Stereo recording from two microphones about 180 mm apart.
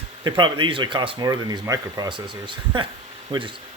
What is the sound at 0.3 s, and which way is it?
Speech, 25° right (ahead or behind).